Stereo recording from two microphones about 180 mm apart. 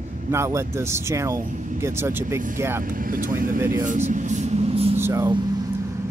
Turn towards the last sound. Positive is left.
turn(degrees=-20)  # may be behind; listen again after turning